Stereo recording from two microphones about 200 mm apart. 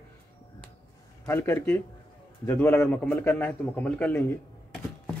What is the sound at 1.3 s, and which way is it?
A man's voice, 10° left (ahead or behind).